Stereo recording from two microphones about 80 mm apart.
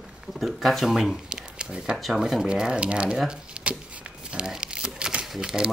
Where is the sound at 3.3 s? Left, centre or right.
Centre.